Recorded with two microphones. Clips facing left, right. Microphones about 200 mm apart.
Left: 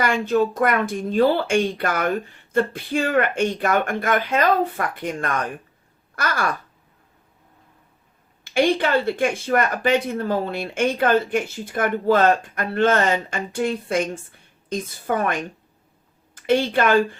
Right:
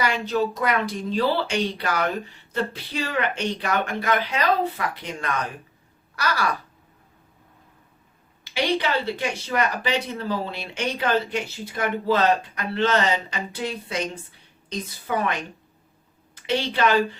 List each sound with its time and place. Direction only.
0.0 s speech: 50° left (ahead or behind)
8.4 s speech: 50° left (ahead or behind)